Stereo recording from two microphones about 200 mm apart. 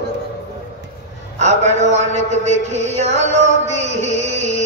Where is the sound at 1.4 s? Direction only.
35° right (ahead or behind).